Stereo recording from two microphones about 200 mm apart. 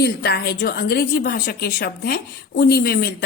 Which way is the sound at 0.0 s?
55° left (ahead or behind).